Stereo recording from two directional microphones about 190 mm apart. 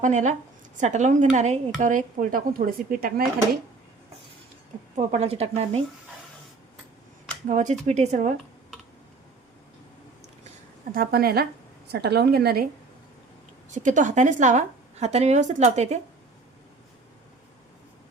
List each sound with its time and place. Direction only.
0.0 s a woman's voice: 40° right (ahead or behind)
4.9 s a woman's voice: 35° right (ahead or behind)
7.4 s a woman's voice: 40° right (ahead or behind)
10.9 s a woman's voice: 50° right (ahead or behind)
13.7 s a woman's voice: 40° right (ahead or behind)